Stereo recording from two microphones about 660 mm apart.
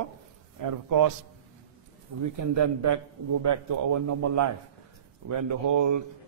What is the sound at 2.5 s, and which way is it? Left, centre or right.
A man's voice, right.